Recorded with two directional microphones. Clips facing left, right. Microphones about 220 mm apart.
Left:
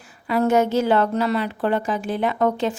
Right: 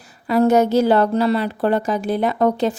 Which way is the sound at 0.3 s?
40° right (ahead or behind).